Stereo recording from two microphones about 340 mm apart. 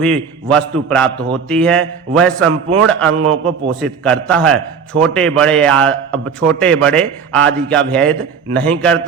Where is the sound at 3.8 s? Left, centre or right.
Centre.